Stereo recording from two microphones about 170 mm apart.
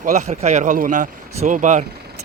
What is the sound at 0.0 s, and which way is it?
Speech, 45° right (ahead or behind).